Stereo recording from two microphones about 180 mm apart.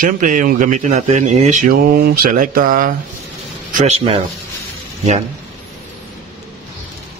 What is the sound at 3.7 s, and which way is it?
Speech, 35° right (ahead or behind).